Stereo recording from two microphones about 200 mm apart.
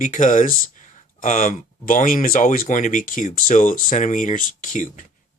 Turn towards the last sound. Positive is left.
turn(degrees=40)  # may be behind; listen again after turning